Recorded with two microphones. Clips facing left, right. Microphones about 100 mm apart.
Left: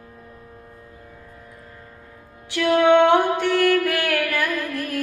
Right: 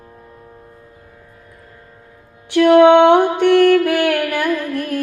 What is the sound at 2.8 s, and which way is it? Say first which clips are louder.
Music: right 4 dB; 20° right (ahead or behind).